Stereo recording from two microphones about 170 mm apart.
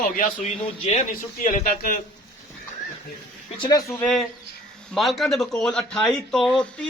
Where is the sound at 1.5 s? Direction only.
55° left (ahead or behind).